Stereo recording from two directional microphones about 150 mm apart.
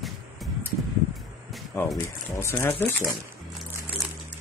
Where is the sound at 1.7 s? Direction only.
15° left (ahead or behind).